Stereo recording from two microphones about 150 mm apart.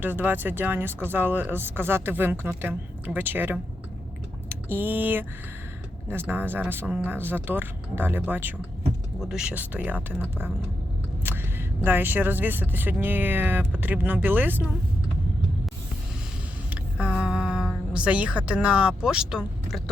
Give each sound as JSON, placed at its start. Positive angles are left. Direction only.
{"t": 0.0, "sound": "speech", "side_deg": -15}
{"t": 11.8, "sound": "speech", "side_deg": -15}
{"t": 16.6, "sound": "a sound", "side_deg": -5}